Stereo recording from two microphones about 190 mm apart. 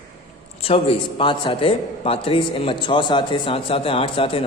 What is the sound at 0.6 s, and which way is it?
A man's voice, 30° left (ahead or behind).